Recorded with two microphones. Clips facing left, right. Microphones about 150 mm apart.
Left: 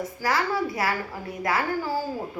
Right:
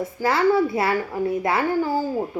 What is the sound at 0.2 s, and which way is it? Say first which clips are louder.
A woman's voice: right 7 dB; 25° right (ahead or behind).